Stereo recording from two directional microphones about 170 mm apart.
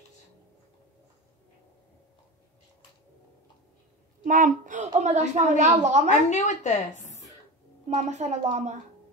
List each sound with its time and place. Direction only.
4.2 s a woman's voice: 50° right (ahead or behind)
6.0 s a woman's voice: 45° left (ahead or behind)
7.9 s a woman's voice: 40° right (ahead or behind)